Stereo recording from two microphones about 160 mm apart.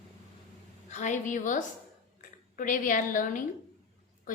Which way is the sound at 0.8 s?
50° left (ahead or behind).